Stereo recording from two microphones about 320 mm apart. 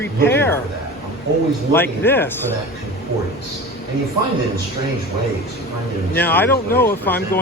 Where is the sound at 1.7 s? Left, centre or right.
Centre.